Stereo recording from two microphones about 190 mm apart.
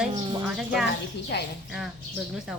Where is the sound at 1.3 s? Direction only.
60° left (ahead or behind).